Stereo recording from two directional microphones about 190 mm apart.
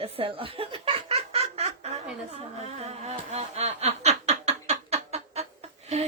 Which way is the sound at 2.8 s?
35° right (ahead or behind).